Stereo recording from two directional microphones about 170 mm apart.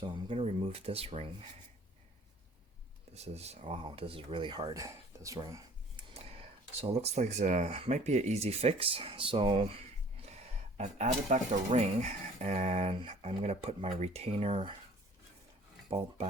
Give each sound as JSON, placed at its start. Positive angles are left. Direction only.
{"t": 0.0, "sound": "speech", "side_deg": -30}
{"t": 3.1, "sound": "speech", "side_deg": -40}
{"t": 6.8, "sound": "speech", "side_deg": -40}